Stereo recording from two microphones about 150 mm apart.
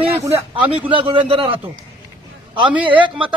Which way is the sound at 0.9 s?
35° right (ahead or behind).